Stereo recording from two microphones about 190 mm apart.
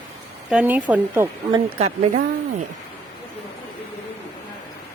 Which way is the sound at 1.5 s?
25° right (ahead or behind).